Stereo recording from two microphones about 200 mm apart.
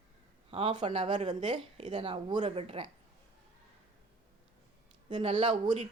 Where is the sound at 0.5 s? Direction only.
25° right (ahead or behind).